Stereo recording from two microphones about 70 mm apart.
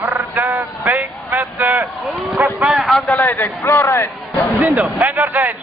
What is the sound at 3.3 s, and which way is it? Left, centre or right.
Speech, left.